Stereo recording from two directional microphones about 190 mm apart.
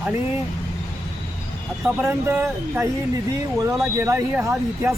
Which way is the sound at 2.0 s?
10° right (ahead or behind).